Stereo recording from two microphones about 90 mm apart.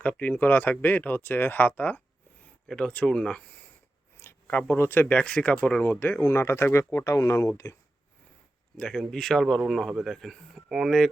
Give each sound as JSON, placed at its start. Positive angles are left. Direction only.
{"t": 0.0, "sound": "speech", "side_deg": 20}
{"t": 4.2, "sound": "a sound", "side_deg": 25}
{"t": 4.7, "sound": "speech", "side_deg": 25}
{"t": 8.8, "sound": "speech", "side_deg": 10}